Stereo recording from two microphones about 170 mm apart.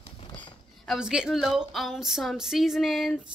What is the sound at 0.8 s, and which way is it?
Speech, 5° right (ahead or behind).